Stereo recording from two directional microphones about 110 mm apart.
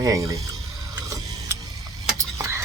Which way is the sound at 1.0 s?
30° right (ahead or behind).